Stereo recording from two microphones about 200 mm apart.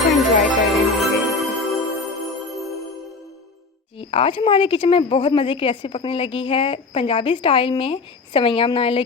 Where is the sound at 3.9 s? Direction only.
25° left (ahead or behind).